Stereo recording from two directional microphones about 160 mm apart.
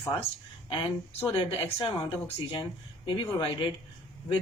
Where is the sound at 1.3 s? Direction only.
30° left (ahead or behind).